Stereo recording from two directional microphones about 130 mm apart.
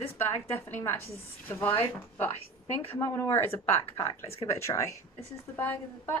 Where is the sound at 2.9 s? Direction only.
25° left (ahead or behind).